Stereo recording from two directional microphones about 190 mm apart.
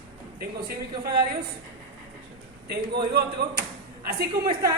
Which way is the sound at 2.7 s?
55° right (ahead or behind).